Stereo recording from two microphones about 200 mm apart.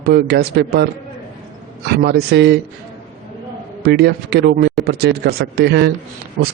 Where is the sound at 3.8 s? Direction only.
55° right (ahead or behind).